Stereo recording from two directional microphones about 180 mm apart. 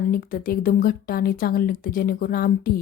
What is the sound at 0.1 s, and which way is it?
A woman's voice, 50° left (ahead or behind).